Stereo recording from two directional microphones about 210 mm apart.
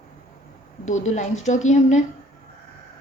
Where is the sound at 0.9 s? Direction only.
35° left (ahead or behind).